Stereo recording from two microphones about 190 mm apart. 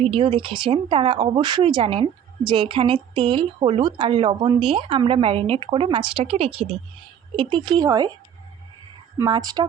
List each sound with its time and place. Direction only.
0.0 s speech: 25° right (ahead or behind)
9.1 s speech: 20° right (ahead or behind)